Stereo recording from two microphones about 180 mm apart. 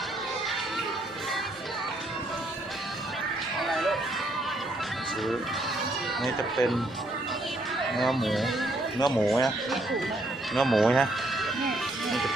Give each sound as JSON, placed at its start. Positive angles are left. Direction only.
{"t": 3.6, "sound": "music", "side_deg": 0}
{"t": 6.6, "sound": "speech", "side_deg": 15}
{"t": 7.8, "sound": "speech", "side_deg": 0}
{"t": 10.5, "sound": "music", "side_deg": 0}